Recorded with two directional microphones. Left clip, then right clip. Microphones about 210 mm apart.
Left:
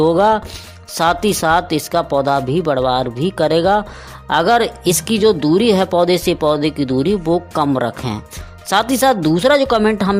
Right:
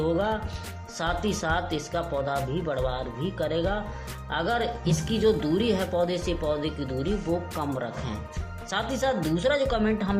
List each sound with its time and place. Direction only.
0.0 s speech: 45° left (ahead or behind)